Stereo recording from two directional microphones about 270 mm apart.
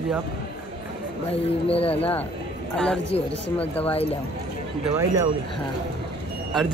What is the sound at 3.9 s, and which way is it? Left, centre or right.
Speech, left.